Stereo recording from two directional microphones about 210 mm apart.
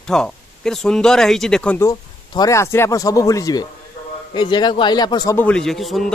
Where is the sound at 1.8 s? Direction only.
15° left (ahead or behind).